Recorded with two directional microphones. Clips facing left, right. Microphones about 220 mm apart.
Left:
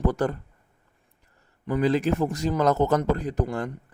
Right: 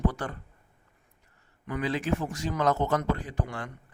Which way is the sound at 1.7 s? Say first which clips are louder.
Left 6 dB; 40° left (ahead or behind).